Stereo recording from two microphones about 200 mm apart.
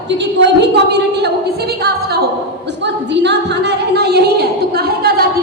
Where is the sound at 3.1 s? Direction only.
60° right (ahead or behind).